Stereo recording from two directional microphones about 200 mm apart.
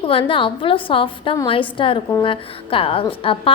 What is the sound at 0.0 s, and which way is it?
A woman's voice, 25° left (ahead or behind).